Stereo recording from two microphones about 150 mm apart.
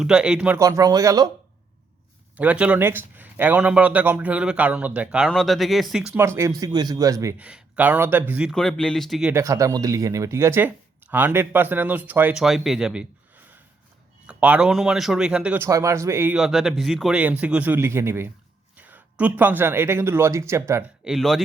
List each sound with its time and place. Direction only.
0.0 s speech: 5° right (ahead or behind)
0.6 s speech: 25° right (ahead or behind)
2.3 s speech: 10° right (ahead or behind)
6.1 s speech: 15° right (ahead or behind)
7.3 s speech: 10° right (ahead or behind)
8.5 s speech: 5° left (ahead or behind)
9.3 s speech: 20° right (ahead or behind)
16.4 s speech: centre (ahead or behind); by 20.8 s 20° right (ahead or behind)
21.0 s speech: centre (ahead or behind)